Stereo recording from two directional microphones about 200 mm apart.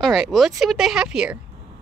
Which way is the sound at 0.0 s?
Centre (ahead or behind).